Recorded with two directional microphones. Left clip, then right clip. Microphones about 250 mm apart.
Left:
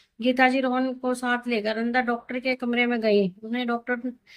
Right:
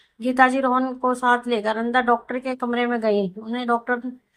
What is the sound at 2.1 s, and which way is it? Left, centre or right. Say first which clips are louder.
Speech: right 7 dB; right.